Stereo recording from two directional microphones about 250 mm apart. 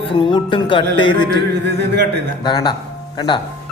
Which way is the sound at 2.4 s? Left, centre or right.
Centre.